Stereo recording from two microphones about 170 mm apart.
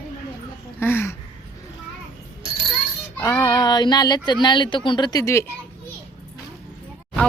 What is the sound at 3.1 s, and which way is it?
Child singing, 20° left (ahead or behind).